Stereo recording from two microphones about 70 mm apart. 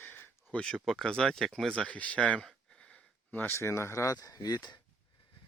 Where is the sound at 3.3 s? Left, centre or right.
Left.